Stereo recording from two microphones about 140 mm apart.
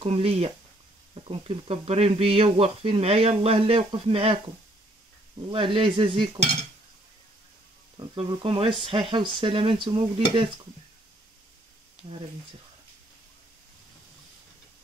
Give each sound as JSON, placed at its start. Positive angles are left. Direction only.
{"t": 0.0, "sound": "speech", "side_deg": -45}
{"t": 5.5, "sound": "speech", "side_deg": -40}
{"t": 8.2, "sound": "speech", "side_deg": -35}